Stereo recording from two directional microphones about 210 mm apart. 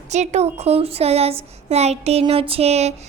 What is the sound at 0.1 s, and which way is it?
A woman's voice, 30° right (ahead or behind).